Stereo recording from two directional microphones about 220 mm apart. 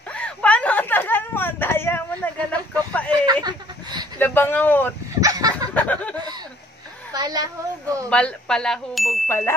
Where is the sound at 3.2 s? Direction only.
20° right (ahead or behind).